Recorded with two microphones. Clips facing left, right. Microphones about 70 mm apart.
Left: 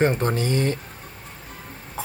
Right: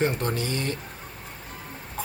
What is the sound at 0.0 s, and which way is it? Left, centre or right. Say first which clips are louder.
Speech: left 5 dB; left.